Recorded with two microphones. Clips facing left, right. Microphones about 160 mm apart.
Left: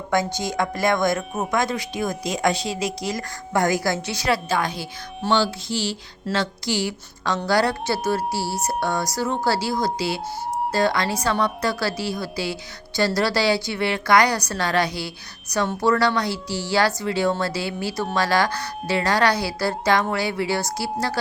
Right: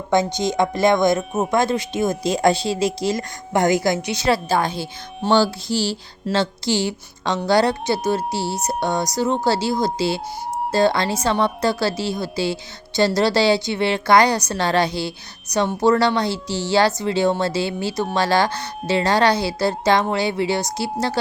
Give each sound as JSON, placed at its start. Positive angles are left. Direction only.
{"t": 0.1, "sound": "a woman's voice", "side_deg": -20}
{"t": 5.3, "sound": "music", "side_deg": -35}
{"t": 6.3, "sound": "a woman's voice", "side_deg": -25}